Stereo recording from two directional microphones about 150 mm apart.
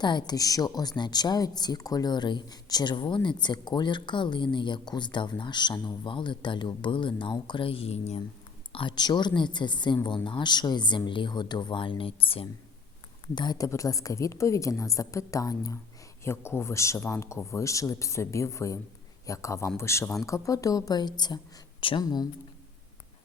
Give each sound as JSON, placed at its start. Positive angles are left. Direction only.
{"t": 0.0, "sound": "speech", "side_deg": 30}
{"t": 8.7, "sound": "speech", "side_deg": 35}